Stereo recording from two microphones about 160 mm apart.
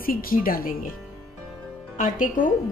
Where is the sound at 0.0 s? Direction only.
65° left (ahead or behind).